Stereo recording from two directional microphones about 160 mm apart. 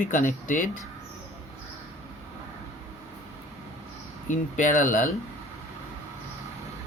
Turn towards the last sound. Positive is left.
turn(degrees=55)  # may be behind; listen again after turning